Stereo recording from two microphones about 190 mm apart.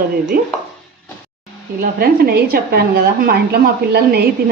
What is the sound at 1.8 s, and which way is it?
A woman's voice, 55° right (ahead or behind).